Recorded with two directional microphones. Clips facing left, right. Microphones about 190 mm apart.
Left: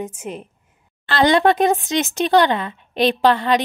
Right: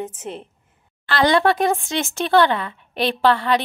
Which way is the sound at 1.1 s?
20° left (ahead or behind).